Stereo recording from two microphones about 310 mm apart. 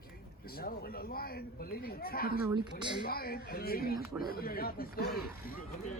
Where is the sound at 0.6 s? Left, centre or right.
Left.